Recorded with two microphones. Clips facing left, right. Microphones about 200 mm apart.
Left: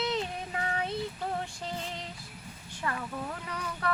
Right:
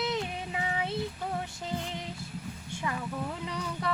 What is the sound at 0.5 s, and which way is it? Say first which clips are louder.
Child singing: even; 10° right (ahead or behind).